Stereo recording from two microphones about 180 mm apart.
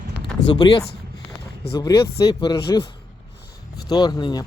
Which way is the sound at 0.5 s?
25° left (ahead or behind).